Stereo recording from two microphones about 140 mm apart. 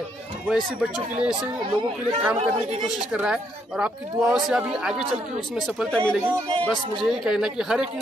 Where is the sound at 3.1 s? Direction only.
5° right (ahead or behind).